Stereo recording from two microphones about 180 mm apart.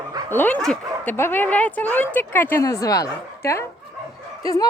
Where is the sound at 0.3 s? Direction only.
10° left (ahead or behind).